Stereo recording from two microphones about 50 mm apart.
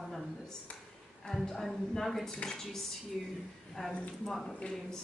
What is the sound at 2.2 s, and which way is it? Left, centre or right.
Speech, centre.